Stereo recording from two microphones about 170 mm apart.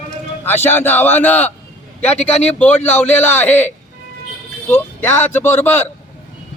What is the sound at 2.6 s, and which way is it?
A man's voice, 10° left (ahead or behind).